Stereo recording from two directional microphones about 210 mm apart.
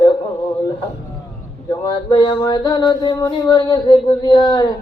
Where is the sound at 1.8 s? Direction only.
20° left (ahead or behind).